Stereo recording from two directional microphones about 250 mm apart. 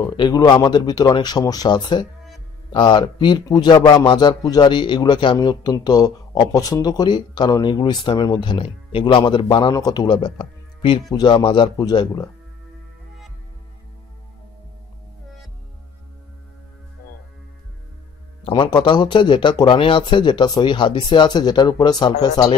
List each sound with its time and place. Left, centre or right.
0.0 s a man's voice: centre
18.4 s a man's voice: centre